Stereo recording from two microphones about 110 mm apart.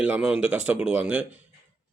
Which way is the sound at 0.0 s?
10° right (ahead or behind).